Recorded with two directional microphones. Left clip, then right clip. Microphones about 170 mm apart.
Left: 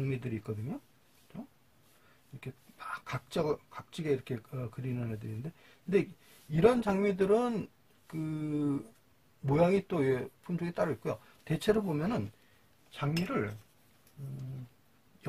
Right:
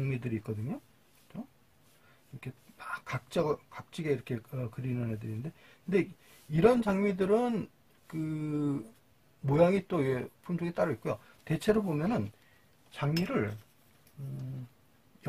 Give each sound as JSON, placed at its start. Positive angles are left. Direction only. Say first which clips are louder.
{"t": 0.0, "sound": "speech", "louder": "right 1 dB", "side_deg": 5}